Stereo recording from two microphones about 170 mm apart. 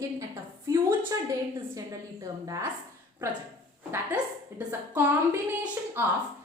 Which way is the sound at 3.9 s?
10° right (ahead or behind).